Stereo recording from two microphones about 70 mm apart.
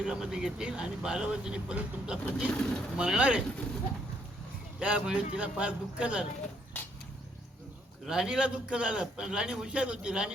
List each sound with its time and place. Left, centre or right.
0.0 s a man's voice: centre
2.5 s speech: centre
3.0 s a man's voice: centre
4.8 s a man's voice: centre
8.0 s a man's voice: centre